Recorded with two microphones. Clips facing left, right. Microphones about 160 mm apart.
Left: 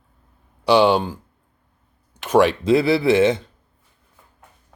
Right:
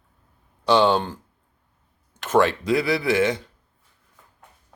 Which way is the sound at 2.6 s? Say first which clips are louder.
Left 5 dB; 25° left (ahead or behind).